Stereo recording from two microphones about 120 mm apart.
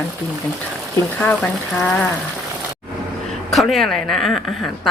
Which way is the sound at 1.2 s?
15° left (ahead or behind).